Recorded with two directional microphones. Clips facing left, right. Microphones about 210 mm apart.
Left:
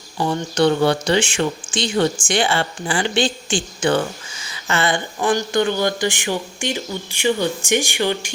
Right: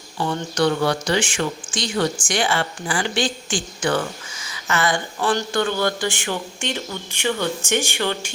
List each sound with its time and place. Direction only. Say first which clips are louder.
0.2 s speech: left 3 dB; 25° left (ahead or behind)
5.2 s speech: left 3 dB; 15° left (ahead or behind)